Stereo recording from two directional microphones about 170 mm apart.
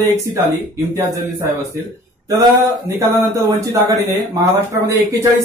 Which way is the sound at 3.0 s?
20° right (ahead or behind).